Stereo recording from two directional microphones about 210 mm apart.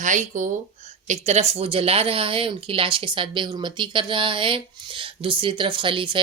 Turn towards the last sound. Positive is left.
turn(degrees=-25)  # may be behind; listen again after turning